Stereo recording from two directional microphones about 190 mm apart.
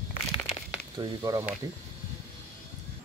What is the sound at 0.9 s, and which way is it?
Speech, 20° right (ahead or behind).